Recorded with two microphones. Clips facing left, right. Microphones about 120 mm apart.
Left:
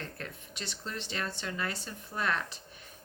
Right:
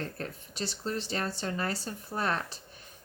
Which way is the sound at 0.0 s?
35° right (ahead or behind).